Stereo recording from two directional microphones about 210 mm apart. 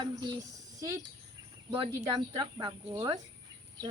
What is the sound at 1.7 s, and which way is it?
Speech, 20° right (ahead or behind).